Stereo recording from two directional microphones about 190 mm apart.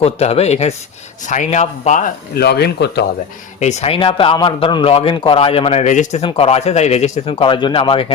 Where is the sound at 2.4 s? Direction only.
60° left (ahead or behind).